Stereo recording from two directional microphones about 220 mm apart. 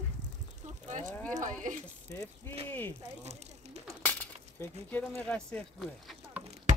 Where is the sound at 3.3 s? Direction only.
30° right (ahead or behind).